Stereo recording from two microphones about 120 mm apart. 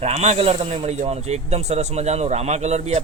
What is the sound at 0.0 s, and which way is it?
Speech, 65° right (ahead or behind).